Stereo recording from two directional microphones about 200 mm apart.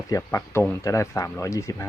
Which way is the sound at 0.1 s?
15° left (ahead or behind).